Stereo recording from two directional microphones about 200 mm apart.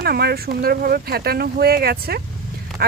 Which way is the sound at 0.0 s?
50° right (ahead or behind).